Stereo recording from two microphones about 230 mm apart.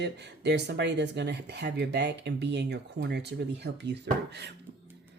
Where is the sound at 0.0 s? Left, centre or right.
Right.